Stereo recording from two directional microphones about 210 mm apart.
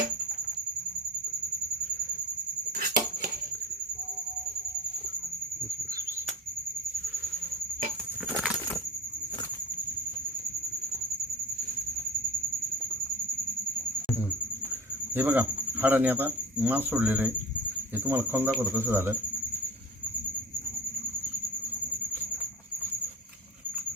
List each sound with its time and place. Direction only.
2.7 s a sound: 45° right (ahead or behind)
8.4 s squeal: 5° left (ahead or behind)
15.1 s speech: 10° right (ahead or behind)
17.9 s cricket: 10° right (ahead or behind)